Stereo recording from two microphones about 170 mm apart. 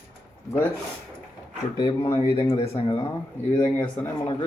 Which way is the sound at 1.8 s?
20° left (ahead or behind).